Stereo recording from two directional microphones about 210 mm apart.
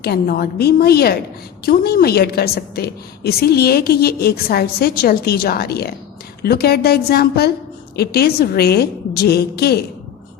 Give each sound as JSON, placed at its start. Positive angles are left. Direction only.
{"t": 0.0, "sound": "a woman's voice", "side_deg": 45}